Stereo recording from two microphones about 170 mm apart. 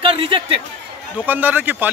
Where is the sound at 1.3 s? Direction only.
10° right (ahead or behind).